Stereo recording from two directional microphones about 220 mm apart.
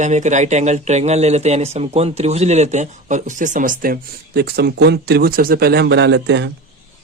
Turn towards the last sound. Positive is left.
turn(degrees=-55)  # may be behind; listen again after turning